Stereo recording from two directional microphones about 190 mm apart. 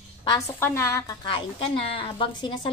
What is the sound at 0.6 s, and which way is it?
A woman's voice, 15° left (ahead or behind).